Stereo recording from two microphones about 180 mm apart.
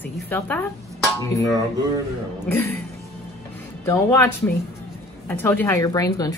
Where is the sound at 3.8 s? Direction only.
15° left (ahead or behind).